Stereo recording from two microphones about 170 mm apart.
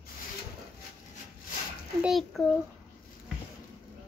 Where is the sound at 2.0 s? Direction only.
Centre (ahead or behind).